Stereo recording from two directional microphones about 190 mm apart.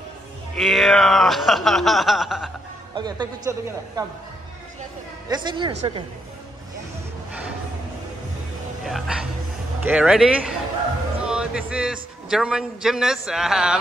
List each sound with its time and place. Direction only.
0.6 s a man's voice: centre (ahead or behind)
3.0 s a man's voice: 20° right (ahead or behind)
5.3 s a man's voice: 25° right (ahead or behind)
8.8 s a man's voice: centre (ahead or behind)